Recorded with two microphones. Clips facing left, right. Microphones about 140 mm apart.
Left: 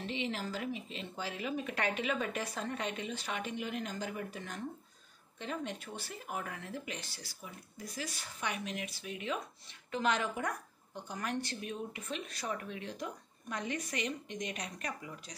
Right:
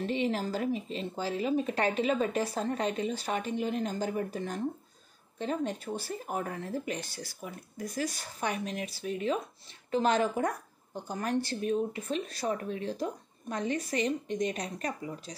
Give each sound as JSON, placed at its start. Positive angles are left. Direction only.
{"t": 0.0, "sound": "a woman's voice", "side_deg": -45}